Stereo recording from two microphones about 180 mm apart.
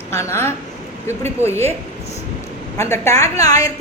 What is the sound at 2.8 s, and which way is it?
Speech, 15° left (ahead or behind).